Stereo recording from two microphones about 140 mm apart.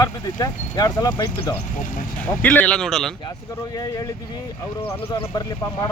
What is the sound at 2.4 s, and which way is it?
Speech, 10° left (ahead or behind).